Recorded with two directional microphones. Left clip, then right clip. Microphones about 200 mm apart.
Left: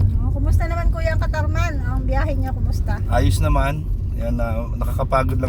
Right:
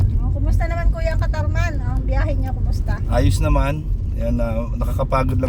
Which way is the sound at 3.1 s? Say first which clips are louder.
Right 1 dB; 30° right (ahead or behind).